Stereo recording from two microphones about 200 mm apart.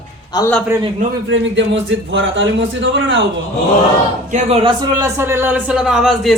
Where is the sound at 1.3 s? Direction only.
65° right (ahead or behind).